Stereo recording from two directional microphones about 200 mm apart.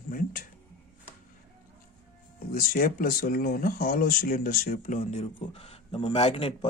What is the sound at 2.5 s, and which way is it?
Speech, 45° left (ahead or behind).